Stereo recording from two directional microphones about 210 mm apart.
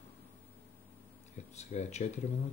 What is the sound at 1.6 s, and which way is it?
Speech, 30° left (ahead or behind).